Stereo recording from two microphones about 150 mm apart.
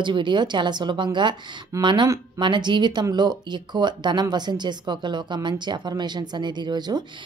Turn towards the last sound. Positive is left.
turn(degrees=-30)  # may be behind; listen again after turning